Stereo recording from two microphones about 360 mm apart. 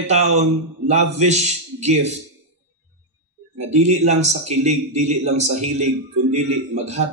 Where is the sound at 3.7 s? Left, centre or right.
Centre.